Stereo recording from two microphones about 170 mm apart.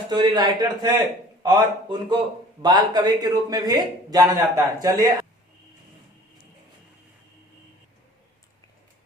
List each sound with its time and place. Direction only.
0.1 s speech: 25° right (ahead or behind)